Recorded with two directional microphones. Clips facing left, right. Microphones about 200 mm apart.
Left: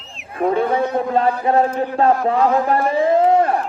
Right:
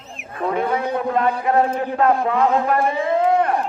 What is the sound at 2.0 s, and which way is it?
A man's voice, 30° left (ahead or behind).